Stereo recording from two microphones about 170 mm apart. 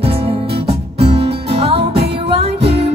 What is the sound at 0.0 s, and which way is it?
Music, 35° right (ahead or behind).